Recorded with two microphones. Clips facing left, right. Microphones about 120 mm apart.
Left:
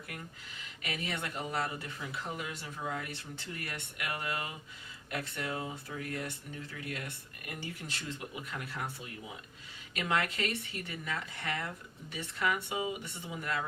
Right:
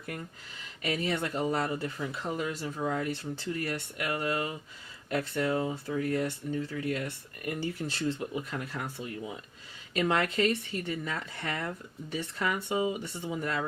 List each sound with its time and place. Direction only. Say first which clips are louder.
0.8 s speech: right 8 dB; 35° right (ahead or behind)
9.9 s speech: right 5 dB; 30° right (ahead or behind)